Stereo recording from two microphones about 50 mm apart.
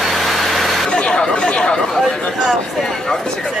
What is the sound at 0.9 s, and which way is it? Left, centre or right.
Speech, centre.